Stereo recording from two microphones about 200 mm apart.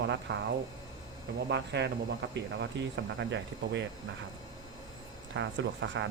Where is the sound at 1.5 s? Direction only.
60° right (ahead or behind).